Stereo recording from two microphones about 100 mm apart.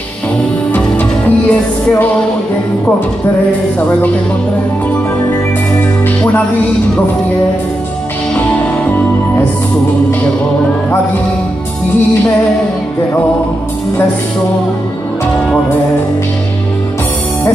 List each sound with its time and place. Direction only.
0.7 s music: 15° left (ahead or behind)